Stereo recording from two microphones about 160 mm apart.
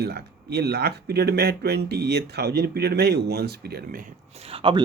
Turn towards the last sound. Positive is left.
turn(degrees=-30)  # may be behind; listen again after turning